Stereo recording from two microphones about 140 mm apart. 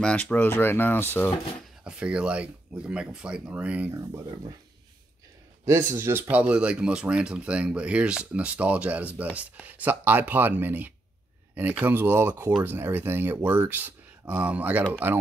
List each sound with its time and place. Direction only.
0.0 s speech: 10° left (ahead or behind)
1.9 s speech: 10° right (ahead or behind)
3.9 s speech: 25° right (ahead or behind)
5.7 s speech: 15° right (ahead or behind)